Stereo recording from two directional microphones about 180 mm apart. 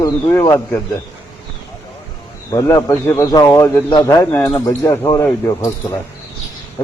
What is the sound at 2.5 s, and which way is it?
A man's voice, 15° left (ahead or behind).